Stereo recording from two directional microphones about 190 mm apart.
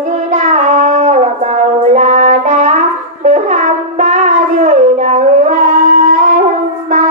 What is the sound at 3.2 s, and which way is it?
Shofar, 40° right (ahead or behind).